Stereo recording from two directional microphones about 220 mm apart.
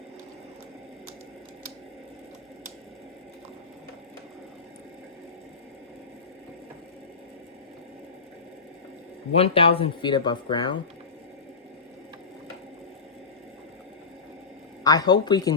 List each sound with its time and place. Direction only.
9.3 s speech: 25° left (ahead or behind)
14.8 s speech: 15° left (ahead or behind)